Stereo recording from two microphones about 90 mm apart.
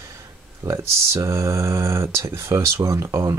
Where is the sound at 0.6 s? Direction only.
35° right (ahead or behind).